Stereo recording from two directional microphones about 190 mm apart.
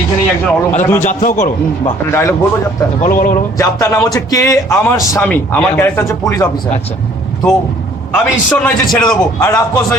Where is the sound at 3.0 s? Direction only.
50° left (ahead or behind).